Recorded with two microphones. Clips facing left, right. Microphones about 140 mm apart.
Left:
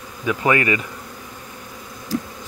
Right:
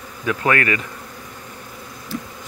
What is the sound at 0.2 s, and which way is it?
Speech, 10° left (ahead or behind).